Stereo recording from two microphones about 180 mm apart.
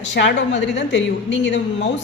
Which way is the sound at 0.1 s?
80° left.